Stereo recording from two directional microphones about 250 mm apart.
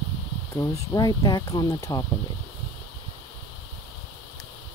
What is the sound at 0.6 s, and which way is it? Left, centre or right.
Speech, centre.